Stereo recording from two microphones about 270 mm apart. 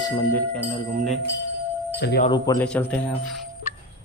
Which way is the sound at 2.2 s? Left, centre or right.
Centre.